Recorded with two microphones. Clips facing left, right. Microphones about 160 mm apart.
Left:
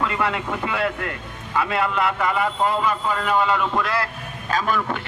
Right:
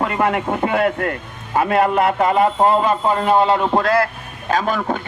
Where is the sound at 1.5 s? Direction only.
50° right (ahead or behind).